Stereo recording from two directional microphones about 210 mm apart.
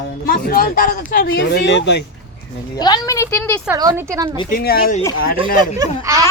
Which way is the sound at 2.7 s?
20° left (ahead or behind).